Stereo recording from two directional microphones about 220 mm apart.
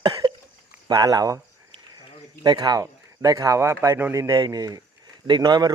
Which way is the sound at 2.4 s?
20° right (ahead or behind).